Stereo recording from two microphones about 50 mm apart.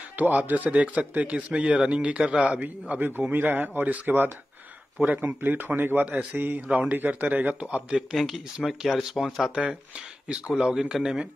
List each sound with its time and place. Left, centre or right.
0.1 s a man's voice: right
3.2 s speech: right
6.7 s a man's voice: right
7.9 s speech: centre
9.6 s speech: centre